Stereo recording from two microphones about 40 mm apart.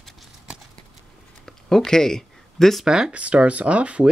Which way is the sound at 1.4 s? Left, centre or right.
Centre.